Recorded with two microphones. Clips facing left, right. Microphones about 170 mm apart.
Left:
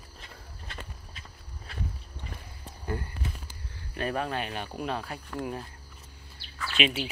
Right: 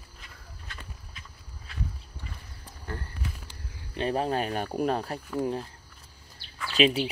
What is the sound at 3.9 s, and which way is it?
Speech, 30° right (ahead or behind).